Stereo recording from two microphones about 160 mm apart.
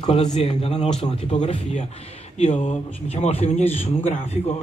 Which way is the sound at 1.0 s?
30° left (ahead or behind).